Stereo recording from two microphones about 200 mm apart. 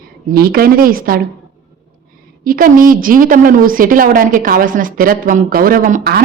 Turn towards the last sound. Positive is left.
turn(degrees=-45)  # may be behind; listen again after turning